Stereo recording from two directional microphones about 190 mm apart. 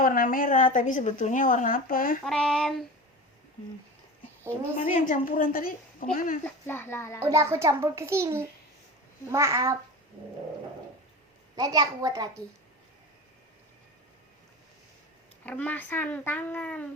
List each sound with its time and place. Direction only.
0.0 s a woman's voice: 45° left (ahead or behind)
2.2 s a sound: centre (ahead or behind)
4.8 s a woman's voice: 40° left (ahead or behind)
6.4 s a child's voice: 10° left (ahead or behind)
7.2 s a child's voice: 15° right (ahead or behind)
11.5 s a child's voice: 20° right (ahead or behind)
15.4 s a child's voice: 10° left (ahead or behind)